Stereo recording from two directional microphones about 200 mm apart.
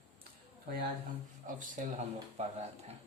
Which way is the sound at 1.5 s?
40° right (ahead or behind).